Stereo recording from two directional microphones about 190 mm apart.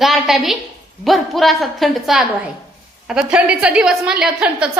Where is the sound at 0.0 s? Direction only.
Centre (ahead or behind).